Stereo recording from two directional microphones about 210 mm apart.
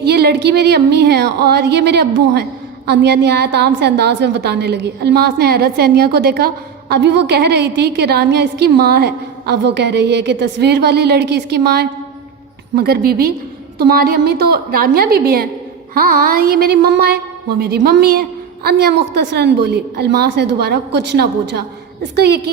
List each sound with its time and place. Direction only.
0.0 s speech: 50° right (ahead or behind)